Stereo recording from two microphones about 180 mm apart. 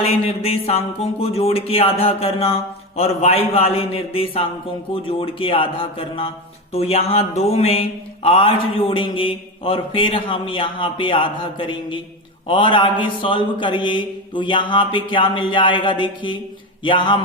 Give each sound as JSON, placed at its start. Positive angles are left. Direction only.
{"t": 0.0, "sound": "speech", "side_deg": 35}